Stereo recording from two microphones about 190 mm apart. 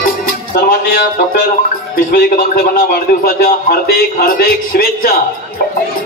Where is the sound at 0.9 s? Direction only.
50° left (ahead or behind).